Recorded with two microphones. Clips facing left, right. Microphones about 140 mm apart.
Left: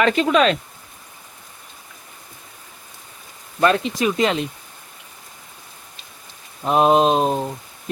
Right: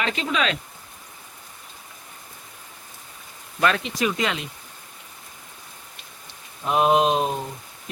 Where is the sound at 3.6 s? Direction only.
30° left (ahead or behind).